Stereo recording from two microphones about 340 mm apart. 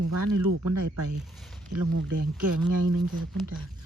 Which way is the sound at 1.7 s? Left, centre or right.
Right.